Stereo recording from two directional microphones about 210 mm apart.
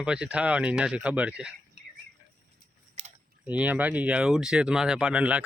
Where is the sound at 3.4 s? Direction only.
5° right (ahead or behind).